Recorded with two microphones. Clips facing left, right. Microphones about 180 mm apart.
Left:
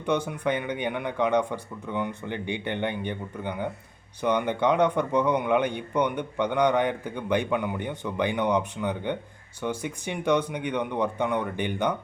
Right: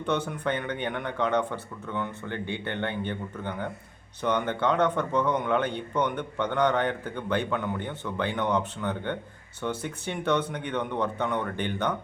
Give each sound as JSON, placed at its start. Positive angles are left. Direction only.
{"t": 0.0, "sound": "speech", "side_deg": 10}